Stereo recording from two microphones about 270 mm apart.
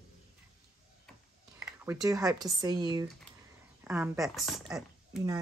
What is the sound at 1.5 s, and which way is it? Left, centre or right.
Speech, centre.